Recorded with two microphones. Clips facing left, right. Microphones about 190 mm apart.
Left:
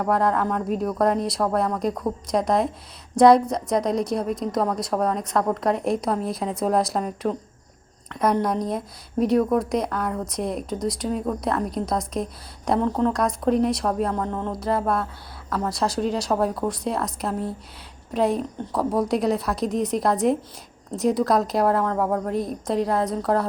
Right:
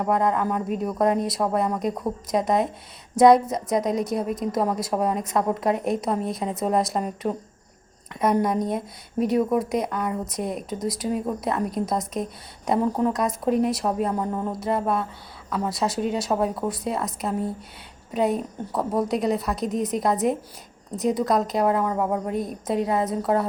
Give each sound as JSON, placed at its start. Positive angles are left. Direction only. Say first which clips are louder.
{"t": 0.0, "sound": "speech", "louder": "left 1 dB", "side_deg": 0}